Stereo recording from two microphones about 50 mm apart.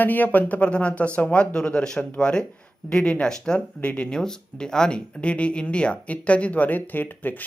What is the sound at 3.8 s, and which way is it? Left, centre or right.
Speech, left.